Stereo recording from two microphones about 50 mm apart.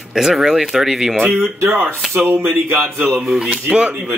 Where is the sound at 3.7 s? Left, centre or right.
Centre.